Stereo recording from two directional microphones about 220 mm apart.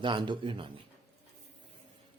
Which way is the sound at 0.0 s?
20° right (ahead or behind).